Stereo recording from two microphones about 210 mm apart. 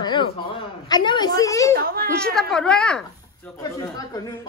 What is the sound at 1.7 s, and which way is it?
Speech, 45° right (ahead or behind).